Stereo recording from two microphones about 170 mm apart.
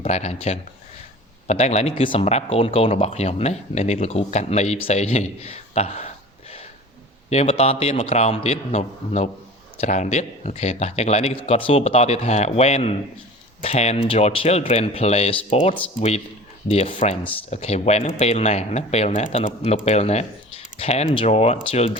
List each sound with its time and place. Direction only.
0.0 s speech: 40° left (ahead or behind)
7.3 s speech: 35° left (ahead or behind)